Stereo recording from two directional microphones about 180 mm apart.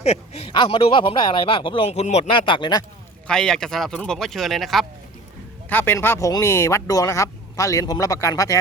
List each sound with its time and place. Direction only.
0.0 s speech: 35° left (ahead or behind)
3.2 s speech: 5° left (ahead or behind)
5.6 s speech: 10° left (ahead or behind)